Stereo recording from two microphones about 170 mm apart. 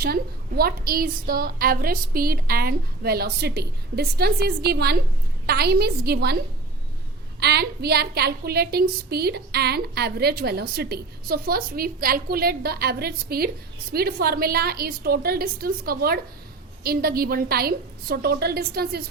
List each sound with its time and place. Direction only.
0.0 s a woman's voice: 65° right (ahead or behind)
7.3 s a woman's voice: 70° right (ahead or behind)